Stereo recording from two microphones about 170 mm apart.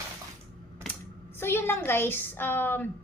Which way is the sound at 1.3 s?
15° left (ahead or behind).